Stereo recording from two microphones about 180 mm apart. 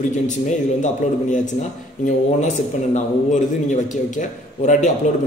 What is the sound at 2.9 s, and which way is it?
A man's voice, 40° left (ahead or behind).